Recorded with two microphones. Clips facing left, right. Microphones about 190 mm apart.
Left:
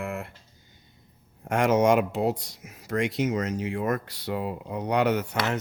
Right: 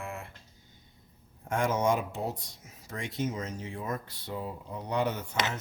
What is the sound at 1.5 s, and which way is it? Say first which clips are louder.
Speech: left 7 dB; 75° left (ahead or behind).